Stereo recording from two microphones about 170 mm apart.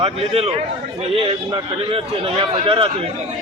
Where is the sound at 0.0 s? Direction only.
35° right (ahead or behind).